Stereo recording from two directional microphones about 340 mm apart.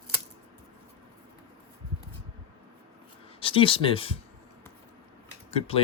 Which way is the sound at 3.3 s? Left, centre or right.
Centre.